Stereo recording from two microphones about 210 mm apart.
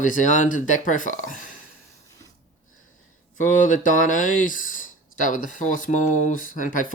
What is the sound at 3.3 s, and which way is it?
Speech, 35° left (ahead or behind).